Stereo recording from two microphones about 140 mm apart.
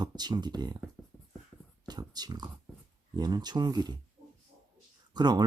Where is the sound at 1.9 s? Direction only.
30° right (ahead or behind).